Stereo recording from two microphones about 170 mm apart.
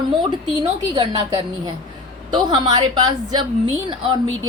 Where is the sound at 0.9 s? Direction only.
25° right (ahead or behind).